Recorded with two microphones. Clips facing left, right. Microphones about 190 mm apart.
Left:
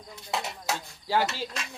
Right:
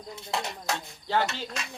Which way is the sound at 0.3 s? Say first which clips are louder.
Even; centre (ahead or behind).